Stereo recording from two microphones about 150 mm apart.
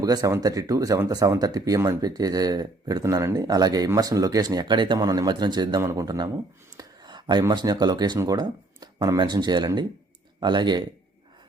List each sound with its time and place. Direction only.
0.0 s speech: 25° right (ahead or behind)